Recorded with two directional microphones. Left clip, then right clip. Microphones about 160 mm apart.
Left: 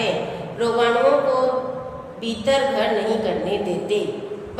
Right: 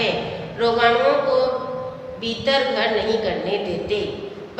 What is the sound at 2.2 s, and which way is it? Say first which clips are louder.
A woman's voice: even; 20° left (ahead or behind).